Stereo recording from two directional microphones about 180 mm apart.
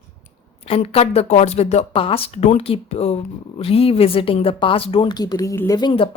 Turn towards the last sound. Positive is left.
turn(degrees=25)  # may be behind; listen again after turning